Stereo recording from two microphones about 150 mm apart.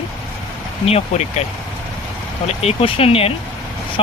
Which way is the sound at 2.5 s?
40° left (ahead or behind).